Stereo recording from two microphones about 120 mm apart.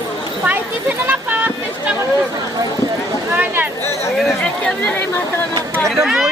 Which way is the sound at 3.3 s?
15° right (ahead or behind).